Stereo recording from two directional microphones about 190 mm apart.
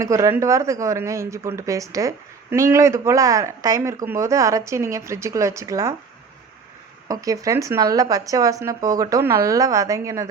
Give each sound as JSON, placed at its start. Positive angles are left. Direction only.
{"t": 0.0, "sound": "speech", "side_deg": -15}
{"t": 7.1, "sound": "speech", "side_deg": -20}